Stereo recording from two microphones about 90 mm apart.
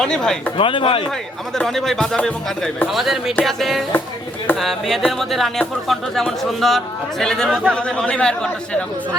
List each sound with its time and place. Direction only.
0.0 s speech: 5° left (ahead or behind)
0.5 s speech: 70° left (ahead or behind)
1.5 s speech: 5° left (ahead or behind)